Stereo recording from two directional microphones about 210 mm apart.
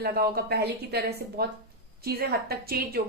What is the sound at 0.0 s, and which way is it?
Speech, 50° right (ahead or behind).